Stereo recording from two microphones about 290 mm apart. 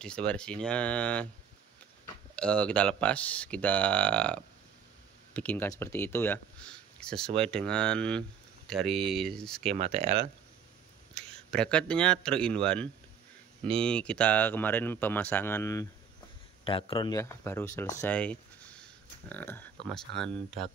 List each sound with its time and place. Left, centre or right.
0.0 s speech: centre
2.3 s speech: centre
9.8 s speech: right
11.1 s speech: centre